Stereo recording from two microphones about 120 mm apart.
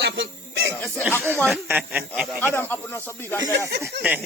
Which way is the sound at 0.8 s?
15° left (ahead or behind).